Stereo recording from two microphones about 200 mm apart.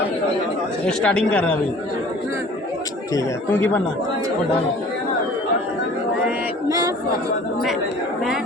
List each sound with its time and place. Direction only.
0.9 s speech: 5° left (ahead or behind)
3.2 s speech: 10° left (ahead or behind)
6.2 s female singing: 15° right (ahead or behind)